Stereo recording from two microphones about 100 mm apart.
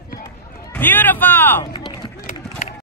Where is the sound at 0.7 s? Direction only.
20° left (ahead or behind).